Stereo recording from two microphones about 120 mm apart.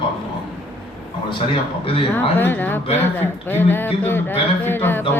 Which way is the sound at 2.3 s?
15° left (ahead or behind).